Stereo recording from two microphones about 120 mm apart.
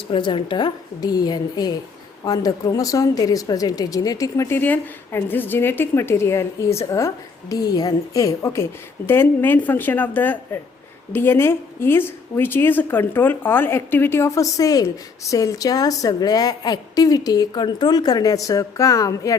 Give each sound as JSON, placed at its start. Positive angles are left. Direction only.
{"t": 0.1, "sound": "a woman's voice", "side_deg": 45}